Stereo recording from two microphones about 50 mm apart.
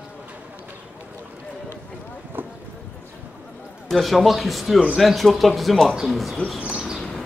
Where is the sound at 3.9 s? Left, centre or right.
Centre.